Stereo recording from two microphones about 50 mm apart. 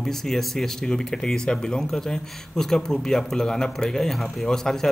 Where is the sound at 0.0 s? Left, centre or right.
Centre.